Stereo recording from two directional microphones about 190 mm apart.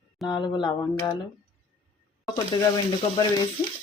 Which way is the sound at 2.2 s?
20° left (ahead or behind).